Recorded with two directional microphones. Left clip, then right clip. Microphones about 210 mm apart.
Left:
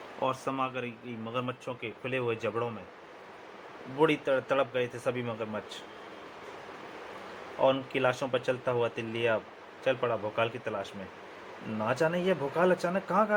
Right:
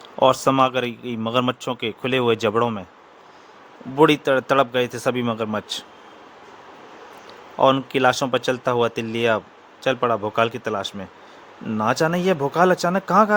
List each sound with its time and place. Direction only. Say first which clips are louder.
0.2 s a man's voice: right 15 dB; 55° right (ahead or behind)
3.9 s a man's voice: right 10 dB; 60° right (ahead or behind)
7.6 s a man's voice: right 10 dB; 60° right (ahead or behind)